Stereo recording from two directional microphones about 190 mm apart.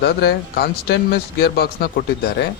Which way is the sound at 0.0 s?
60° left (ahead or behind).